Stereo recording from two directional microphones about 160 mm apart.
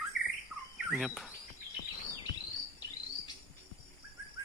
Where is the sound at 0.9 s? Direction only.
Centre (ahead or behind).